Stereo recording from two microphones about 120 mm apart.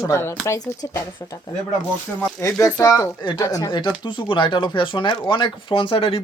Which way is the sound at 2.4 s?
25° left (ahead or behind).